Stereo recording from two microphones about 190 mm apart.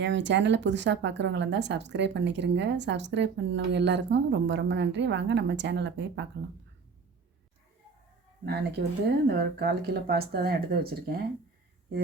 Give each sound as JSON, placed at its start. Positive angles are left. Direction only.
{"t": 0.0, "sound": "speech", "side_deg": -65}
{"t": 8.4, "sound": "speech", "side_deg": -60}